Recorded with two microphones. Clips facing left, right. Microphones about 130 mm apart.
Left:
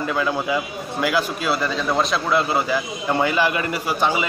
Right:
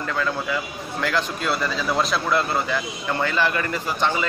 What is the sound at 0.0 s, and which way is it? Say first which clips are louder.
A man's voice: left 3 dB; 15° left (ahead or behind).